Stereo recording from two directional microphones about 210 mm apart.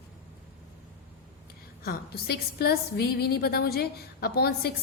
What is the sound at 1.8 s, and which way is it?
A woman's voice, 50° left (ahead or behind).